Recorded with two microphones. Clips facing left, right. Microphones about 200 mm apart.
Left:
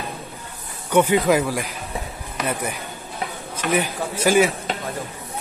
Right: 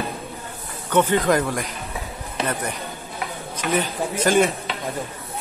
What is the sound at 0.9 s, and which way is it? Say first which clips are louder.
Speech: left 2 dB; 10° left (ahead or behind).